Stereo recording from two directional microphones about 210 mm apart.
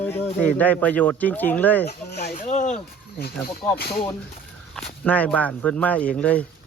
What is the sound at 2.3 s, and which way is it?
Speech, 35° left (ahead or behind).